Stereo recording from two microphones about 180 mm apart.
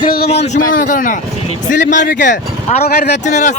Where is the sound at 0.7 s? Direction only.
50° left (ahead or behind).